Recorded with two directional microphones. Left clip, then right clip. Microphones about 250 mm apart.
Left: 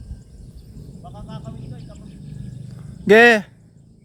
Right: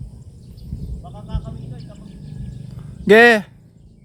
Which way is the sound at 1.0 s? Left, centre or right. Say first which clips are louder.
Left 1 dB; centre.